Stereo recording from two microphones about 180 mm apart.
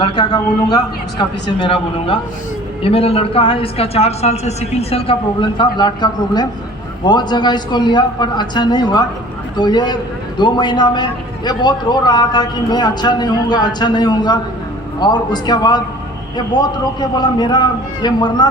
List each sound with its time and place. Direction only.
0.0 s a man's voice: 25° left (ahead or behind)